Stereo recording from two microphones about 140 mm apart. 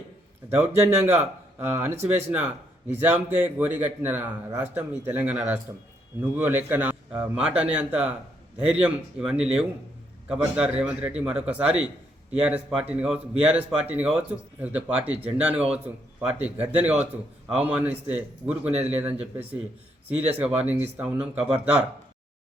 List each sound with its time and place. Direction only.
0.5 s speech: 20° right (ahead or behind)